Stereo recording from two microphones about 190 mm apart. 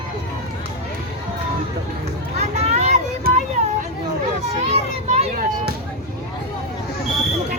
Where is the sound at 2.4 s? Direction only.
35° right (ahead or behind).